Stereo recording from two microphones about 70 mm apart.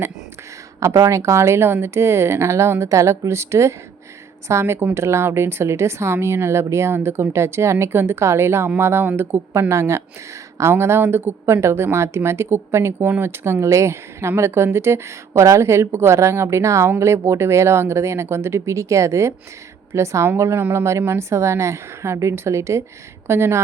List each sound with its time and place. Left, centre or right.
0.9 s a woman's voice: right
20.3 s a woman's voice: right